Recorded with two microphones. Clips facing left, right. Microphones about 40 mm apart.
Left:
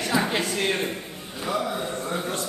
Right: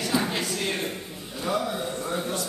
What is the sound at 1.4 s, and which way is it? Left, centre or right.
Speech, centre.